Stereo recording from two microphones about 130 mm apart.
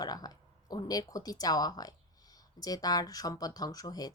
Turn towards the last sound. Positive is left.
turn(degrees=30)  # may be behind; listen again after turning